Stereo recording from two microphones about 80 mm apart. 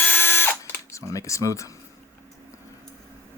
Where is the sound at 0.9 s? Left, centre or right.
Left.